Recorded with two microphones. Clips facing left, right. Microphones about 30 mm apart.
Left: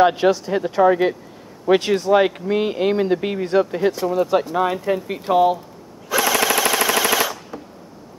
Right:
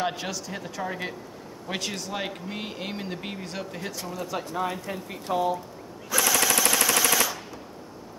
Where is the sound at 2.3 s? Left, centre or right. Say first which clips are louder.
Left 14 dB; left.